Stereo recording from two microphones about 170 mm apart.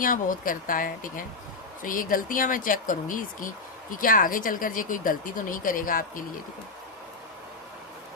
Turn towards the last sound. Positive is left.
turn(degrees=55)  # may be behind; listen again after turning